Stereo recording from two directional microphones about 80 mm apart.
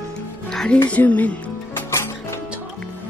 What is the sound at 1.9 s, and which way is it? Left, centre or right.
Music, left.